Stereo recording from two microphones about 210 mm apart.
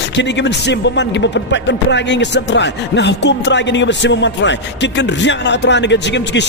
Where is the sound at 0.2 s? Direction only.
55° left (ahead or behind).